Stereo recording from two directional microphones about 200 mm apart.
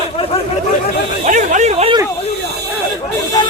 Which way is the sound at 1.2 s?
35° right (ahead or behind).